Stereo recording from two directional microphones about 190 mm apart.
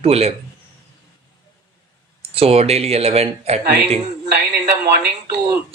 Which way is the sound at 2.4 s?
35° right (ahead or behind).